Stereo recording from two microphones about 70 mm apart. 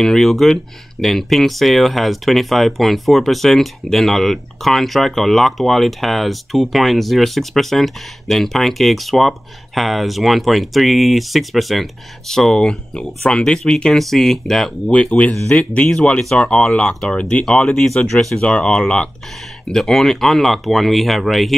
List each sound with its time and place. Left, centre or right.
0.0 s speech: centre
17.5 s speech: centre